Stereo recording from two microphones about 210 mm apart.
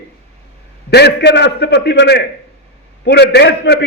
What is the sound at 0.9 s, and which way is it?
A man's voice, 50° left (ahead or behind).